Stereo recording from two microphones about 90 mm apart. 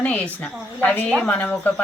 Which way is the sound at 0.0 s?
15° left (ahead or behind).